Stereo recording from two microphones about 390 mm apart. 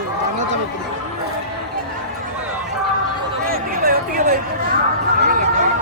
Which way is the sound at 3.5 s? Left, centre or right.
Right.